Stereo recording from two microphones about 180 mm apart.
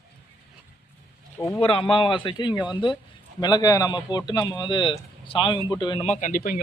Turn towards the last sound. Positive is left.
turn(degrees=50)  # may be behind; listen again after turning